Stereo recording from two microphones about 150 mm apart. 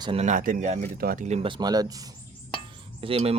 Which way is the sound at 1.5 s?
25° right (ahead or behind).